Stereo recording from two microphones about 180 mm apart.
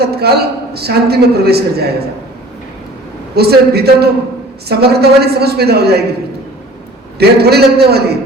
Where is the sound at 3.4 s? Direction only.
60° right (ahead or behind).